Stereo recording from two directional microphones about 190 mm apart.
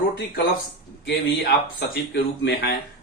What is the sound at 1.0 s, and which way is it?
Speech, 60° left (ahead or behind).